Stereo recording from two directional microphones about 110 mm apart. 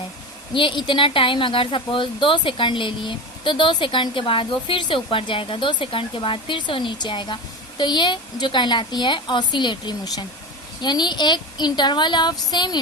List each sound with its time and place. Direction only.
0.5 s a woman's voice: 45° left (ahead or behind)